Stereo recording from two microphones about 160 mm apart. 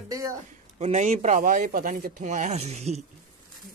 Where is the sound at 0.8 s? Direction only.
45° right (ahead or behind).